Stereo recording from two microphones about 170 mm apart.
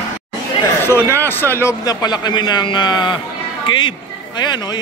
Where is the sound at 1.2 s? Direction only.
10° left (ahead or behind).